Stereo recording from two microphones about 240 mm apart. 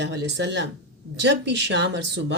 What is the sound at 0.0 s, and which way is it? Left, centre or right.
Speech, right.